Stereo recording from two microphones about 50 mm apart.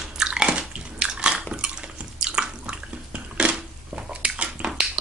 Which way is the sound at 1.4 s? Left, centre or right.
Right.